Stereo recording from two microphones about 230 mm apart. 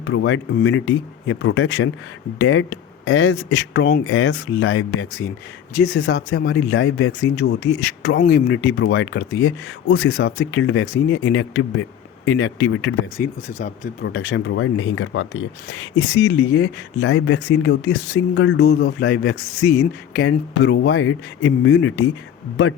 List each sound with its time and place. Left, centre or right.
0.0 s speech: left
4.0 s speech: left
6.7 s speech: left
7.1 s speech: left
13.1 s speech: left